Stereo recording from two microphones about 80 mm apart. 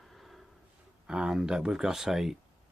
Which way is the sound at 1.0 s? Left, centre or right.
Centre.